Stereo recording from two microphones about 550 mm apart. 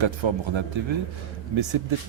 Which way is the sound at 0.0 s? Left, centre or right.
Right.